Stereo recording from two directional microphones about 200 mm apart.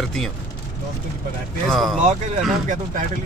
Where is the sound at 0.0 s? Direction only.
Centre (ahead or behind).